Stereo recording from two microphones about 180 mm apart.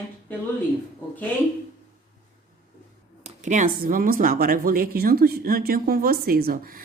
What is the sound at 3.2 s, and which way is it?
A woman's voice, 45° right (ahead or behind).